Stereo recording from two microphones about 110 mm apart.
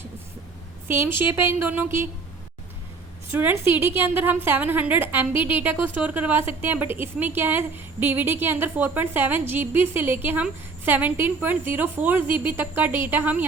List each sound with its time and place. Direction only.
0.9 s a woman's voice: 20° right (ahead or behind)
3.3 s a woman's voice: 20° right (ahead or behind)